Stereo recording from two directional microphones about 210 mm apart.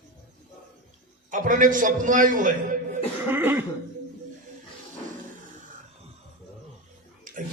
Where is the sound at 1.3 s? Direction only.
40° right (ahead or behind).